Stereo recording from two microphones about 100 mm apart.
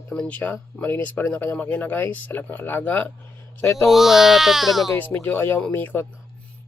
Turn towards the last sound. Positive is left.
turn(degrees=20)  # may be behind; listen again after turning